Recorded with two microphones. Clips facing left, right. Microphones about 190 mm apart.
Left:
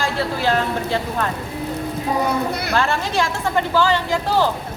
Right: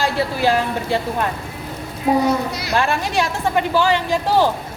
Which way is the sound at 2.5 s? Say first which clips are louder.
Left 2 dB; 55° left (ahead or behind).